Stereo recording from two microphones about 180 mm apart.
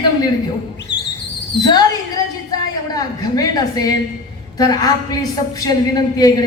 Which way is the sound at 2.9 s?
20° left (ahead or behind).